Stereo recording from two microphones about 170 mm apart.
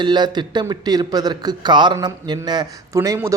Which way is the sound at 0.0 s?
25° right (ahead or behind).